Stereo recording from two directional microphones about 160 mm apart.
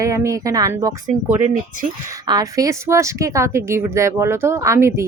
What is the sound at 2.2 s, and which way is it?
Speech, 20° right (ahead or behind).